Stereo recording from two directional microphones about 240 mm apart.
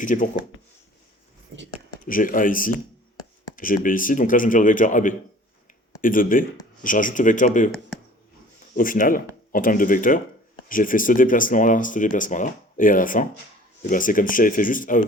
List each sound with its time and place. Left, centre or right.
0.0 s speech: left
1.5 s speech: right
2.0 s speech: left
8.7 s speech: left